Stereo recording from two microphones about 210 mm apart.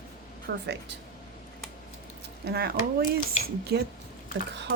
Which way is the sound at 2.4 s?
50° right (ahead or behind).